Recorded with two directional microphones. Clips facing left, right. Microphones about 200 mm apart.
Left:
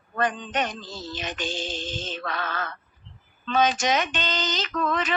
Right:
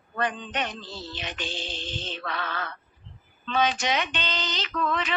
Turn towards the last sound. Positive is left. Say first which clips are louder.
# left 2 dB
turn(degrees=45)  # may be behind; listen again after turning